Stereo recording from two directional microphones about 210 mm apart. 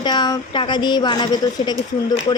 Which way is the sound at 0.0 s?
20° left (ahead or behind).